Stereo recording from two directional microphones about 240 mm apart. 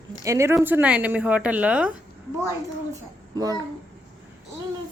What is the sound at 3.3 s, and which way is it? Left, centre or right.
Speech, centre.